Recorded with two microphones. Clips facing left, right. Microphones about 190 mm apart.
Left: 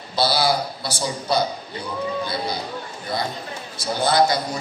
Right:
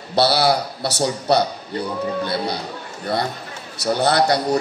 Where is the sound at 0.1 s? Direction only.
70° right (ahead or behind).